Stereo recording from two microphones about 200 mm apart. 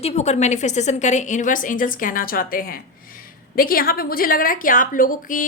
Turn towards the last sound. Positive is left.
turn(degrees=40)  # may be behind; listen again after turning